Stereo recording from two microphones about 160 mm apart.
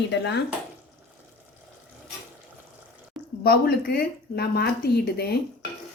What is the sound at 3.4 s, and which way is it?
Speech, 75° left (ahead or behind).